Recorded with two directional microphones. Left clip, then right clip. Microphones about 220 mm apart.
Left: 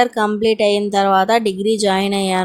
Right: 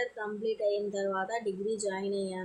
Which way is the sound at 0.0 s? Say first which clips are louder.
Left 18 dB; 45° left (ahead or behind).